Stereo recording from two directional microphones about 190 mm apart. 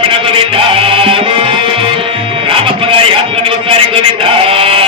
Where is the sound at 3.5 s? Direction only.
25° right (ahead or behind).